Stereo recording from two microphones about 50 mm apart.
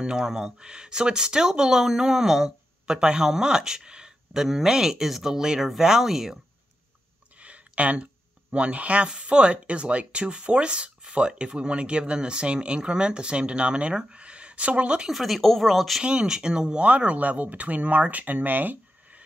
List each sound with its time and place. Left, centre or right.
0.0 s speech: centre
7.3 s speech: right
15.0 s speech: centre
16.0 s speech: centre; by 19.2 s right